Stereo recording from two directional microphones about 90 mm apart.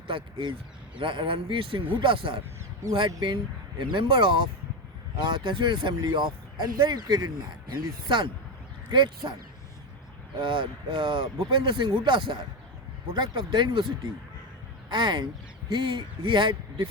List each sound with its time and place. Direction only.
0.1 s speech: 70° right (ahead or behind)
3.1 s speech: 55° right (ahead or behind)
10.4 s speech: 65° right (ahead or behind)